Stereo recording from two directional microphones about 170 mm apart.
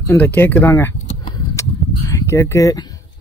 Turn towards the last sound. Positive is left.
turn(degrees=20)  # may be behind; listen again after turning